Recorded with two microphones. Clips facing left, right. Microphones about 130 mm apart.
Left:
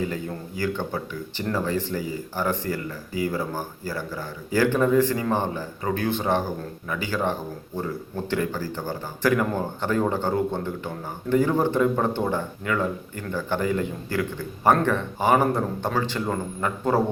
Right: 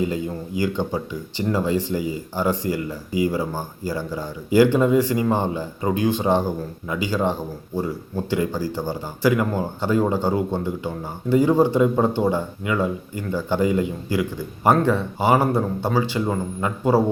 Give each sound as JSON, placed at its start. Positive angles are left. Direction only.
{"t": 0.0, "sound": "a man's voice", "side_deg": -15}